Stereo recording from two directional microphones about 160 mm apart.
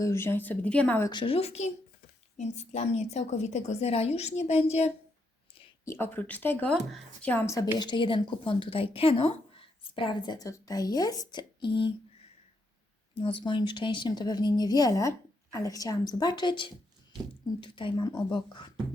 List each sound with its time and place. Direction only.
0.0 s a woman's voice: 15° left (ahead or behind)
1.1 s a woman's voice: 35° left (ahead or behind)
5.8 s a woman's voice: 15° left (ahead or behind)
7.8 s a woman's voice: 30° left (ahead or behind)
13.1 s a woman's voice: 35° left (ahead or behind)